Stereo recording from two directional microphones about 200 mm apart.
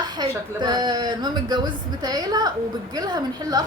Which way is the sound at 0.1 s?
20° right (ahead or behind).